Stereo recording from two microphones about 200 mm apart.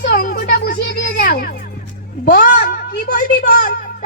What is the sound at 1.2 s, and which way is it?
A child's voice, 50° left (ahead or behind).